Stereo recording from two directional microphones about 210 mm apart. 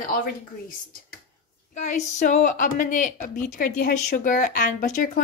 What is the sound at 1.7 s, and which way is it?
A woman's voice, 35° left (ahead or behind).